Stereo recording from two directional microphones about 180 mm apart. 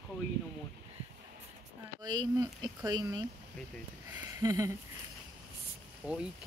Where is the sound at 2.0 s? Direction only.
20° right (ahead or behind).